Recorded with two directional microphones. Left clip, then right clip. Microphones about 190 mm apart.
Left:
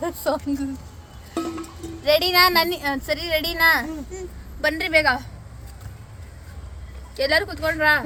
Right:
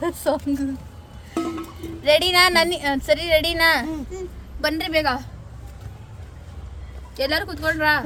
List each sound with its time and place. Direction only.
0.0 s speech: 10° right (ahead or behind)
2.0 s speech: 20° right (ahead or behind)
7.2 s speech: 5° right (ahead or behind)